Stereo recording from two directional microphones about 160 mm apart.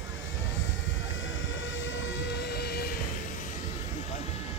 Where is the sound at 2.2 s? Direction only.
90° left.